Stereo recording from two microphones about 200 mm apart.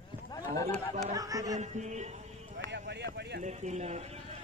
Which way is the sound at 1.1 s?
15° right (ahead or behind).